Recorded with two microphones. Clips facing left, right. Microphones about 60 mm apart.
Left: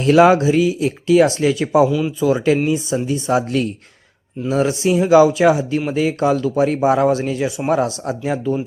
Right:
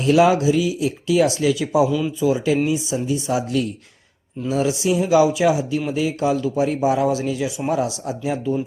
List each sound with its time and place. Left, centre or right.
0.0 s speech: left
5.1 s speech: left